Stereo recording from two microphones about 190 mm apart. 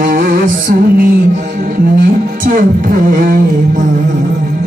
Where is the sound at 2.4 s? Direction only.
45° right (ahead or behind).